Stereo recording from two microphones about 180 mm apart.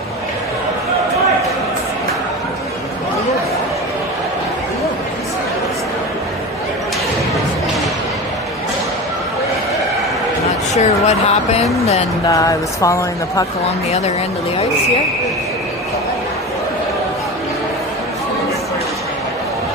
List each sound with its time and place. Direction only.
10.8 s speech: 35° left (ahead or behind)
12.3 s speech: 20° left (ahead or behind)